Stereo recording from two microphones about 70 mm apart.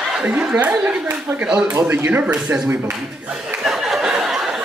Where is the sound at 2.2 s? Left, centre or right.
Centre.